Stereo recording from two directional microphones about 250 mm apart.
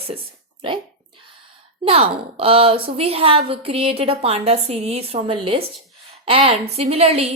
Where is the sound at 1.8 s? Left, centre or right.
Right.